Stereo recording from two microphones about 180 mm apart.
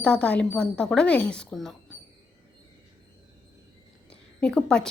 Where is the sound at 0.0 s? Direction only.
5° left (ahead or behind).